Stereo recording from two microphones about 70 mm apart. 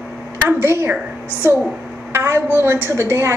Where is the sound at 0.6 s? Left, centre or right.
Right.